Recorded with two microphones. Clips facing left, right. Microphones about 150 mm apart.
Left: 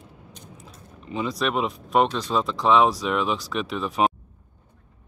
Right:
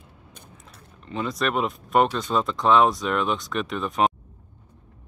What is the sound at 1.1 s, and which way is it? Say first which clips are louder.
Speech: even; centre (ahead or behind).